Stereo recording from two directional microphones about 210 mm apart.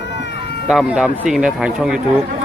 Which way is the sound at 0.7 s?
Centre (ahead or behind).